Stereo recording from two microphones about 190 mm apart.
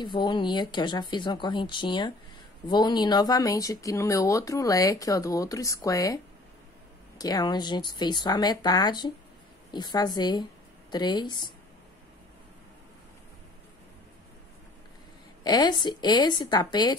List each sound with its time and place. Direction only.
0.0 s speech: 25° left (ahead or behind)
7.2 s speech: 20° left (ahead or behind)
15.4 s speech: 20° left (ahead or behind)